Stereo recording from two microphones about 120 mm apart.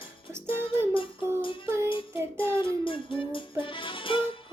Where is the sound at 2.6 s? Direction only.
45° left (ahead or behind).